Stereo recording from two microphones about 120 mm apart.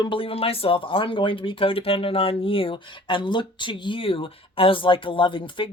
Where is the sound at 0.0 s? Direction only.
45° left (ahead or behind).